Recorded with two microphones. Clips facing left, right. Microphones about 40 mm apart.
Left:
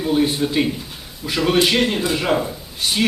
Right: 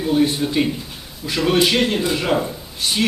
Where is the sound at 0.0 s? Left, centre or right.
Centre.